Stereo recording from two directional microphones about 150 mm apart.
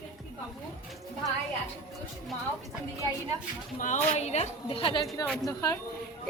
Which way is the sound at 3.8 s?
55° left (ahead or behind).